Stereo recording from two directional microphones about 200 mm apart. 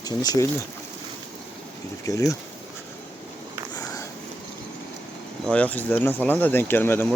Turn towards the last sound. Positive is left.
turn(degrees=10)  # may be behind; listen again after turning